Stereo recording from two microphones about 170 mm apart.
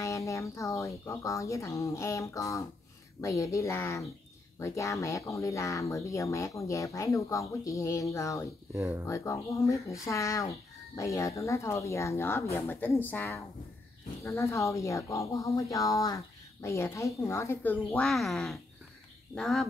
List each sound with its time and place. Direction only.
0.0 s speech: 20° left (ahead or behind)
8.7 s speech: 15° right (ahead or behind)
9.0 s speech: 15° left (ahead or behind); by 19.7 s centre (ahead or behind)